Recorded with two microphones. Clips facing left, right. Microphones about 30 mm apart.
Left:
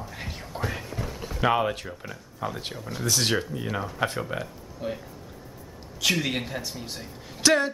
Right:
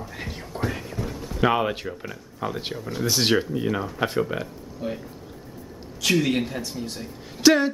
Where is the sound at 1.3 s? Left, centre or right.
Centre.